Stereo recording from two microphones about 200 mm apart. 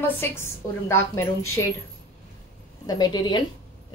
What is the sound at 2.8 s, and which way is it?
Speech, 20° left (ahead or behind).